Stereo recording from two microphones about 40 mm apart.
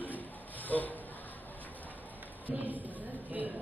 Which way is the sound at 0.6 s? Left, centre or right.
Left.